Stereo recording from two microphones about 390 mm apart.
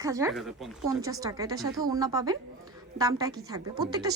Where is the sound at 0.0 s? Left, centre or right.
Centre.